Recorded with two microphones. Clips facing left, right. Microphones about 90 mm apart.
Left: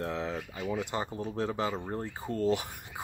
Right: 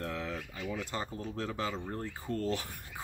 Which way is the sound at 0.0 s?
20° left (ahead or behind).